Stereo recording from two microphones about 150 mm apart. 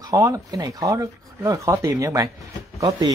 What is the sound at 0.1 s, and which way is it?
Speech, 20° right (ahead or behind).